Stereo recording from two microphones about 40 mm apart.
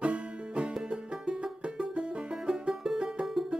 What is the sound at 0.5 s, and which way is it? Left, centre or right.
Music, centre.